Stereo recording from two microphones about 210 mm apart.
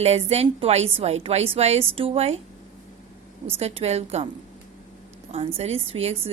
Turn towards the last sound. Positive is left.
turn(degrees=-30)  # may be behind; listen again after turning